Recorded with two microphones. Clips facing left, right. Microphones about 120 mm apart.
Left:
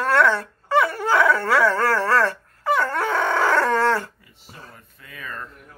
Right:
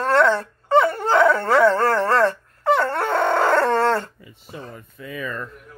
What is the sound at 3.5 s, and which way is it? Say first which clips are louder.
Dog: right 1 dB; 20° right (ahead or behind).